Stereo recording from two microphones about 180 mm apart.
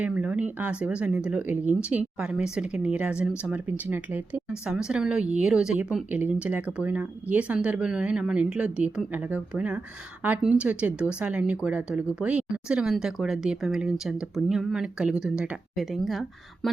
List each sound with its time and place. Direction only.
0.0 s speech: 5° right (ahead or behind)